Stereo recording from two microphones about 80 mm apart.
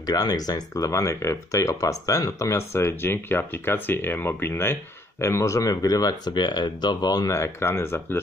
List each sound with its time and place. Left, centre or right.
0.0 s speech: left
7.3 s speech: left